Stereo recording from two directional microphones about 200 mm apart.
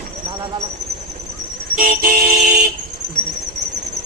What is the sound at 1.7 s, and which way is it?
Vehicle, 45° right (ahead or behind).